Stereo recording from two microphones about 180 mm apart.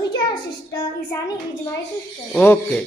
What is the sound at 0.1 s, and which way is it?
Child singing, 25° left (ahead or behind).